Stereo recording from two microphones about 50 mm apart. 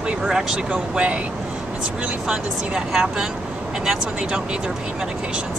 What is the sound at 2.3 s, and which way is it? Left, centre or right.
Speech, centre.